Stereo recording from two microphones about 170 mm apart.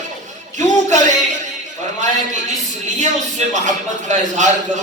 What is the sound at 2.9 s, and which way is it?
A man's voice, 45° right (ahead or behind).